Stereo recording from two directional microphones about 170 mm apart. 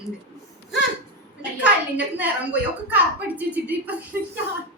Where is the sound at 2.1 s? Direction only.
10° right (ahead or behind).